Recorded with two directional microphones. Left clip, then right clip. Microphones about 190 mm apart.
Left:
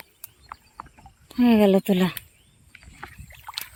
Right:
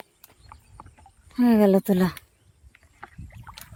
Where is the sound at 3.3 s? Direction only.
30° left (ahead or behind).